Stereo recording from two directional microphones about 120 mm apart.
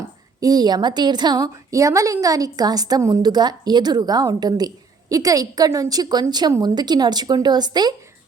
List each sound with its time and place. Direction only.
0.3 s a woman's voice: 30° right (ahead or behind)